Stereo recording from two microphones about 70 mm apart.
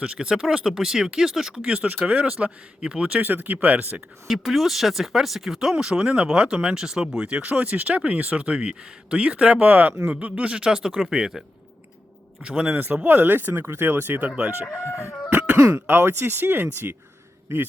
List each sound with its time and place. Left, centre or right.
0.0 s speech: centre
3.2 s speech: right
4.3 s speech: centre
12.5 s speech: centre
14.7 s chicken: left
15.3 s cough: right
15.9 s speech: right